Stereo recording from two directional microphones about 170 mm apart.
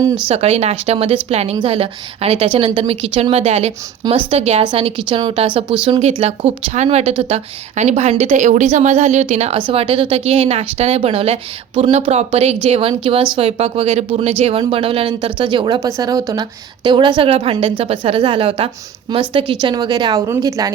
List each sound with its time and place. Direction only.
0.3 s a woman's voice: 35° right (ahead or behind); by 20.7 s 20° right (ahead or behind)